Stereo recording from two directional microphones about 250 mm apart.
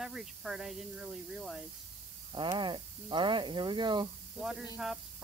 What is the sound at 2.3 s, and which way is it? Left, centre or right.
Speech, centre.